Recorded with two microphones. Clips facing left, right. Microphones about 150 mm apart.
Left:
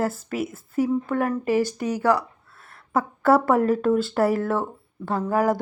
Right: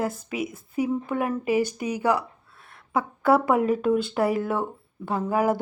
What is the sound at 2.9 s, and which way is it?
Speech, centre (ahead or behind).